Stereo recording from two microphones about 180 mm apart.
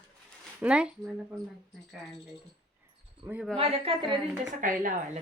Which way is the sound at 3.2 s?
10° right (ahead or behind).